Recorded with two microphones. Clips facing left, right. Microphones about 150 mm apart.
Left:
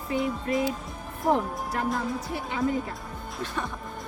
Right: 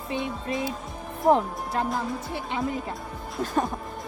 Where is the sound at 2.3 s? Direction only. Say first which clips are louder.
Right 1 dB; 30° right (ahead or behind).